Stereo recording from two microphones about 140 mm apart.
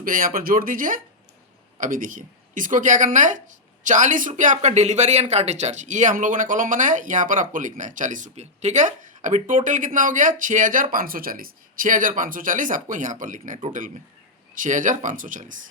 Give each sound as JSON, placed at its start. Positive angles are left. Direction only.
{"t": 0.0, "sound": "speech", "side_deg": -90}
{"t": 10.9, "sound": "speech", "side_deg": -90}